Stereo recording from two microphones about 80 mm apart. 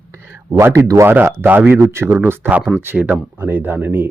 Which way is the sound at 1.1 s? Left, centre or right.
Right.